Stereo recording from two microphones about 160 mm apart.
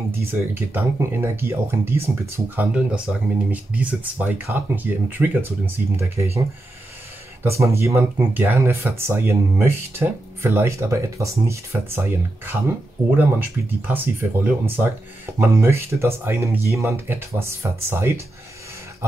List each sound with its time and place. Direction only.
0.3 s speech: 15° right (ahead or behind)
7.4 s speech: 15° right (ahead or behind)